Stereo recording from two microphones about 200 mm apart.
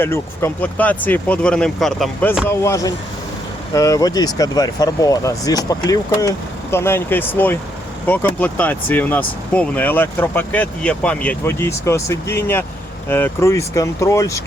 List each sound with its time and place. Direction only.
0.0 s speech: 10° left (ahead or behind)
2.5 s speech: 15° left (ahead or behind)